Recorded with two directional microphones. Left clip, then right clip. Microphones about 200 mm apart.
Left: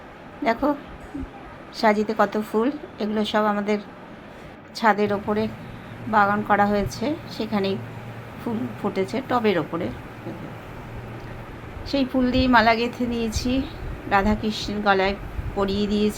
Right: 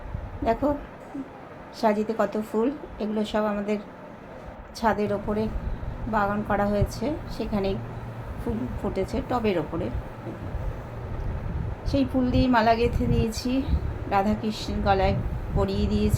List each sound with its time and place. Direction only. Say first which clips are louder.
0.4 s a woman's voice: left 2 dB; 10° left (ahead or behind)
1.8 s a woman's voice: left 4 dB; 10° left (ahead or behind)
4.8 s a woman's voice: left 5 dB; 10° left (ahead or behind)
8.5 s speech: left 2 dB; 25° left (ahead or behind)
8.9 s a woman's voice: left 4 dB; 10° left (ahead or behind)
11.9 s a woman's voice: left 3 dB; 10° left (ahead or behind)